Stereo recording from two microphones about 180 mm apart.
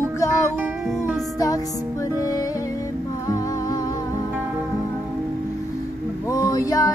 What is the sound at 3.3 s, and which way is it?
Music, 20° left (ahead or behind).